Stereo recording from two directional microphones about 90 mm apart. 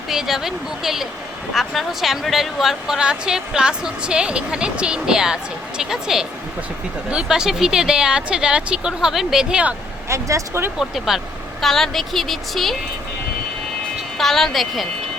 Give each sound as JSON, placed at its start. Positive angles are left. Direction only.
{"t": 0.1, "sound": "speech", "side_deg": -5}
{"t": 10.1, "sound": "speech", "side_deg": -35}
{"t": 10.8, "sound": "speech", "side_deg": -5}
{"t": 14.2, "sound": "speech", "side_deg": 5}